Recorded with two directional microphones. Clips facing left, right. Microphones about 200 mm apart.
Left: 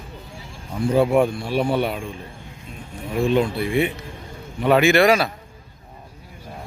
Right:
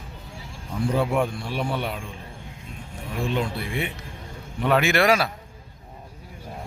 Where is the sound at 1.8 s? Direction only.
10° left (ahead or behind).